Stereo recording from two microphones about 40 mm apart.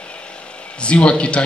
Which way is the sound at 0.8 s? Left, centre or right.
Left.